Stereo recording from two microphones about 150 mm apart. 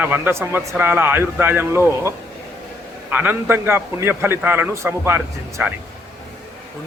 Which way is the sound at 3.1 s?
10° right (ahead or behind).